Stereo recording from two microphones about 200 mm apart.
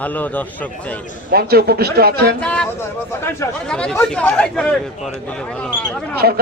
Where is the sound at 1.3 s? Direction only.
50° right (ahead or behind).